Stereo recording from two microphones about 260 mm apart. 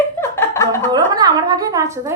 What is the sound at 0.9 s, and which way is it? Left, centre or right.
A woman's voice, centre.